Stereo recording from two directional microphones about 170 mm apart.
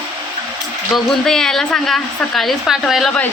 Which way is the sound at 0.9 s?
5° left (ahead or behind).